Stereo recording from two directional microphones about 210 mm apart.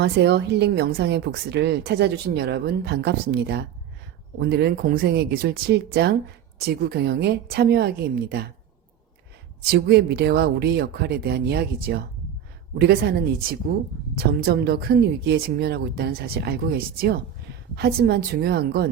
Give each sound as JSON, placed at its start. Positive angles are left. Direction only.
{"t": 0.0, "sound": "a woman's voice", "side_deg": -50}
{"t": 9.7, "sound": "a woman's voice", "side_deg": -50}